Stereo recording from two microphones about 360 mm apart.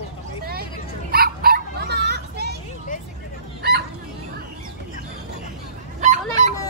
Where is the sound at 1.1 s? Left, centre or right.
Right.